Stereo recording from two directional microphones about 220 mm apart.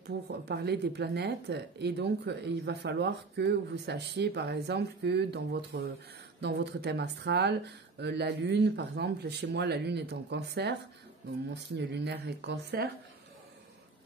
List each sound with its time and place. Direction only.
0.0 s speech: 50° right (ahead or behind)